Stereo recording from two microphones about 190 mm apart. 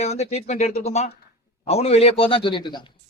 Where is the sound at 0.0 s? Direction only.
35° left (ahead or behind).